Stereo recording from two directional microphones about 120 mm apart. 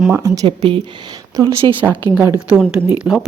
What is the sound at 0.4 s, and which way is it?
Speech, 40° right (ahead or behind).